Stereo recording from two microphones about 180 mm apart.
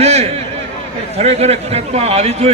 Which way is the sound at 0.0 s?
35° right (ahead or behind).